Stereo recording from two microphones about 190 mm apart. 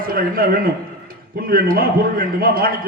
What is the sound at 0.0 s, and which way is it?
A man's voice, 50° right (ahead or behind).